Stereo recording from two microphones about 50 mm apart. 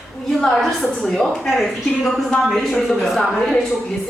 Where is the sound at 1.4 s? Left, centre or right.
Centre.